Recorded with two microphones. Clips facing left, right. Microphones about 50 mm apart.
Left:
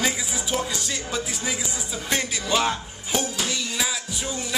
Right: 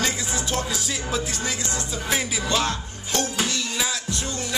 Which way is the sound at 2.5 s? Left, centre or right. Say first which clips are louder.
Left 3 dB; centre.